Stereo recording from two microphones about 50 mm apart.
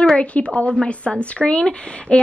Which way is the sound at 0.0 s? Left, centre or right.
Left.